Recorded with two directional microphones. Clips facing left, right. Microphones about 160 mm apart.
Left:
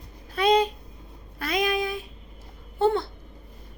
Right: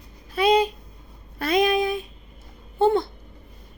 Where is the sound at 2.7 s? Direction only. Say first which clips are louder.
Right 3 dB; 15° right (ahead or behind).